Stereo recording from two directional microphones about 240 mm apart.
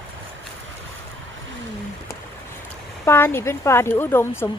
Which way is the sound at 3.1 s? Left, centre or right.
Centre.